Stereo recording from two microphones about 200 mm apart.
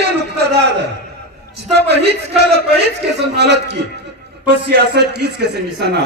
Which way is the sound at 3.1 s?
55° right (ahead or behind).